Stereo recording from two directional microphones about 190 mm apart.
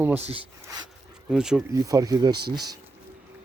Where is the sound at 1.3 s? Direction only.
5° right (ahead or behind).